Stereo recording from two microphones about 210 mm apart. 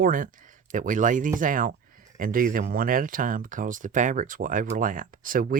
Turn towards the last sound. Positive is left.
turn(degrees=-40)  # may be behind; listen again after turning